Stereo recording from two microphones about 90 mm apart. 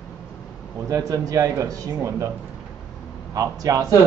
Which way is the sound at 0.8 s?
35° right (ahead or behind).